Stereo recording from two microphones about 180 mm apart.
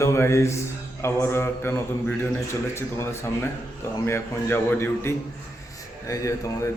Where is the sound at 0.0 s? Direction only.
15° left (ahead or behind).